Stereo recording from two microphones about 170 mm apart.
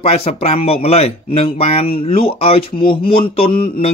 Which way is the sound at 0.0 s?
40° left (ahead or behind).